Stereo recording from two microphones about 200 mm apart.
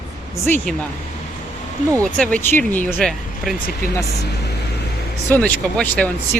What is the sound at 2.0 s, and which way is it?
Speech, 5° left (ahead or behind).